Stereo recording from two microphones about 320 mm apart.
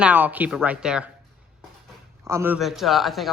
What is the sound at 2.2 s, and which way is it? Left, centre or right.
A man's voice, centre.